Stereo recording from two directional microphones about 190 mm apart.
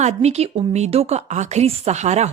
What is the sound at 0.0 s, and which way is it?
A woman's voice, 35° right (ahead or behind).